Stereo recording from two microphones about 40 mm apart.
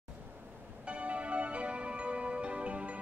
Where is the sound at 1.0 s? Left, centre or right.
Right.